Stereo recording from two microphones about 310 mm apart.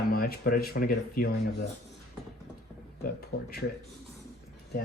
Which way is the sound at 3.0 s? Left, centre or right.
Left.